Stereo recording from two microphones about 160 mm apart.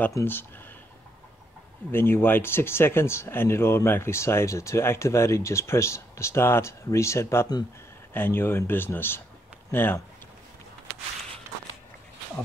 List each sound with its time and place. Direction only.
0.0 s speech: 15° left (ahead or behind)
1.9 s speech: 15° left (ahead or behind)